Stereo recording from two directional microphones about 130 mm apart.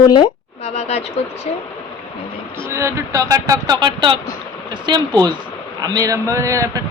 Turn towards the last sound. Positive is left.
turn(degrees=-25)  # may be behind; listen again after turning